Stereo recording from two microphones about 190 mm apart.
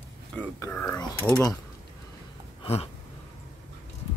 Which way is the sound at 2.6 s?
30° left (ahead or behind).